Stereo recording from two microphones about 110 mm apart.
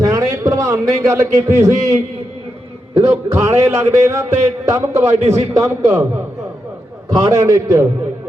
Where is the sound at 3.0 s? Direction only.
25° right (ahead or behind).